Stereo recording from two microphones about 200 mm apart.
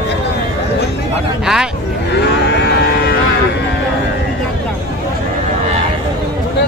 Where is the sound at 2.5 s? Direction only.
55° left (ahead or behind).